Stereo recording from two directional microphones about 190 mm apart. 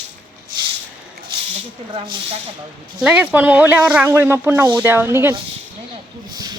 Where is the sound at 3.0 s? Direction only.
5° right (ahead or behind).